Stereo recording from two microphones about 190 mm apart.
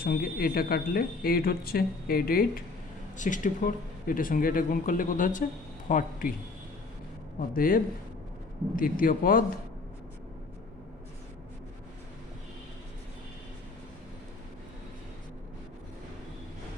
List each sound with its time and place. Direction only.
0.0 s speech: 50° left (ahead or behind)
7.5 s speech: 50° left (ahead or behind)